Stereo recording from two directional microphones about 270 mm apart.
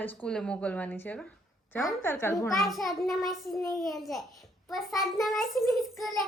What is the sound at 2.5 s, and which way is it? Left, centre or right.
A child's voice, centre.